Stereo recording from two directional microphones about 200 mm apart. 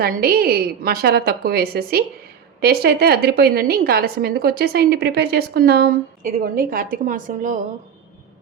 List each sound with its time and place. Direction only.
0.0 s a woman's voice: 50° right (ahead or behind)